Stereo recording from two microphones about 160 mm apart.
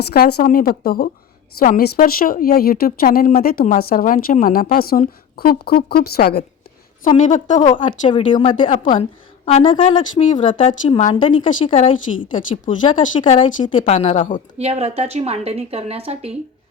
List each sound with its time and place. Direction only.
0.0 s a woman's voice: 75° left (ahead or behind)
7.3 s a woman's voice: 50° left (ahead or behind)
7.8 s a woman's voice: 30° left (ahead or behind); by 14.4 s 50° left (ahead or behind)
14.6 s a woman's voice: 40° right (ahead or behind)